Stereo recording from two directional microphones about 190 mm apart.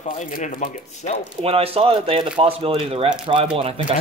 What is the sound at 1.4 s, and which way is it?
Speech, 30° right (ahead or behind).